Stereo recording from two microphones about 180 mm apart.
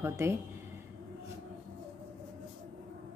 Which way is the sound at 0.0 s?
15° right (ahead or behind).